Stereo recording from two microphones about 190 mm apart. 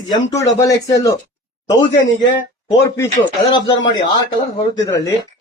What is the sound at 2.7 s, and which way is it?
Speech, 15° left (ahead or behind).